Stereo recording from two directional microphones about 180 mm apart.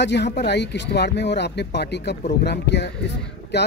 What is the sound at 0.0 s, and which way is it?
Speech, 70° left (ahead or behind).